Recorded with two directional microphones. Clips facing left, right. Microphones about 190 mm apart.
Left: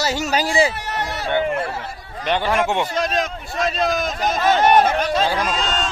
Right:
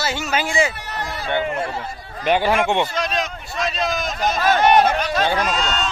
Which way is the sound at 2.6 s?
5° left (ahead or behind).